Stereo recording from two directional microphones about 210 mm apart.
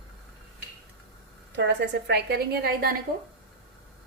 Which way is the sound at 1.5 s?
55° right (ahead or behind).